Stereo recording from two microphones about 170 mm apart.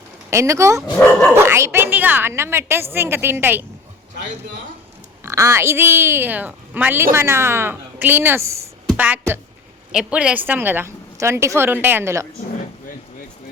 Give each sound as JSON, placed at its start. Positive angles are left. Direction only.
{"t": 0.3, "sound": "a woman's voice", "side_deg": -15}
{"t": 0.9, "sound": "speech", "side_deg": 10}
{"t": 1.4, "sound": "a woman's voice", "side_deg": -15}
{"t": 5.2, "sound": "a woman's voice", "side_deg": -15}